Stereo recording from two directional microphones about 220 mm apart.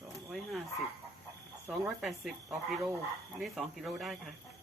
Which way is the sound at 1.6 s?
5° right (ahead or behind).